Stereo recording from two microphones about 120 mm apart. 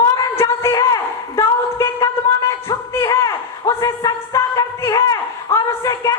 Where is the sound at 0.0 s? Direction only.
25° left (ahead or behind).